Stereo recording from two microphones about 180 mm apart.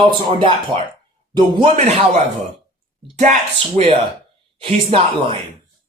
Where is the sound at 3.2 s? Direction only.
40° right (ahead or behind).